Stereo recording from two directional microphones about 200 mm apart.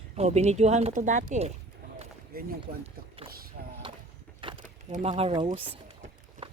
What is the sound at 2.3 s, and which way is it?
Speech, 50° right (ahead or behind).